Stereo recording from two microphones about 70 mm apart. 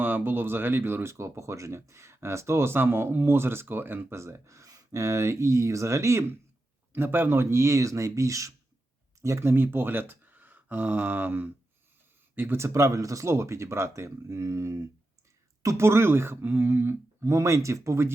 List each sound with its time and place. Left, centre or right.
0.0 s speech: right
4.2 s speech: right
4.9 s speech: right
6.9 s speech: right
12.4 s speech: right